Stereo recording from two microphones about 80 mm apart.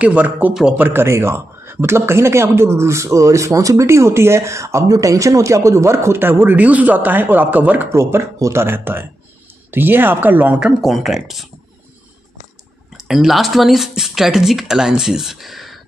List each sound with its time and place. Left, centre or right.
0.0 s a man's voice: centre
7.9 s a man's voice: right; by 10.7 s centre
10.8 s speech: centre
12.9 s speech: centre